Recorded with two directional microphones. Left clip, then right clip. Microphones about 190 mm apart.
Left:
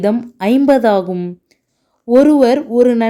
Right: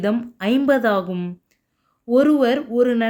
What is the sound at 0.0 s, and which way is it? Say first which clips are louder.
A woman's voice: left 6 dB; 30° left (ahead or behind).